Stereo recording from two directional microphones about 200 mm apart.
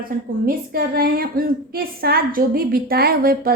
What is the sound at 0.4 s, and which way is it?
A woman's voice, 50° right (ahead or behind).